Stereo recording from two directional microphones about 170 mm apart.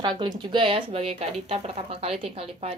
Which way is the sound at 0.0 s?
25° right (ahead or behind).